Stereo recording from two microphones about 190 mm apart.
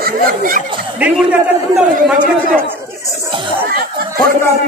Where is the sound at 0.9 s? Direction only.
5° right (ahead or behind).